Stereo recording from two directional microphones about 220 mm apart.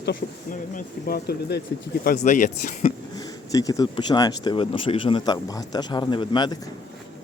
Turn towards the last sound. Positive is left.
turn(degrees=20)  # may be behind; listen again after turning